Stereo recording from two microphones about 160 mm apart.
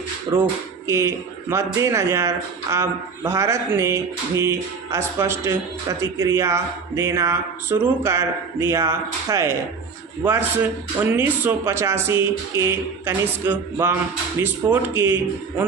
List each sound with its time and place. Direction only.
0.3 s speech: 20° right (ahead or behind)